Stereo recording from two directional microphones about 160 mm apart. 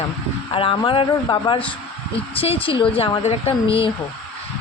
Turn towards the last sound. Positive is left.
turn(degrees=35)  # may be behind; listen again after turning